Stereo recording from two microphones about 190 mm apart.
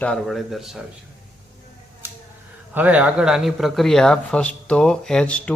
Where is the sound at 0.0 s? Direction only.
5° left (ahead or behind).